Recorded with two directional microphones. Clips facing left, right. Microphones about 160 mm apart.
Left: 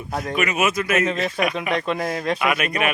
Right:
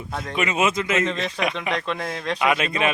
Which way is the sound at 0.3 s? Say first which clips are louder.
Even; 25° right (ahead or behind).